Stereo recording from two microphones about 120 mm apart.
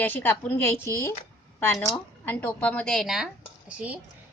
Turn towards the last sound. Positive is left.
turn(degrees=-10)  # may be behind; listen again after turning